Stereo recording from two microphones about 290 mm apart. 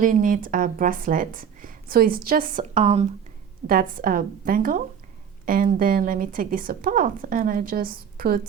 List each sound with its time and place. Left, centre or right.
0.0 s a woman's voice: right